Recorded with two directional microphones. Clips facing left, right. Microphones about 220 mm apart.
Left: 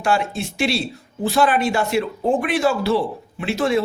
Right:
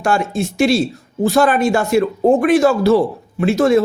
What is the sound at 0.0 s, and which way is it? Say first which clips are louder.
Speech: right 4 dB; 45° right (ahead or behind).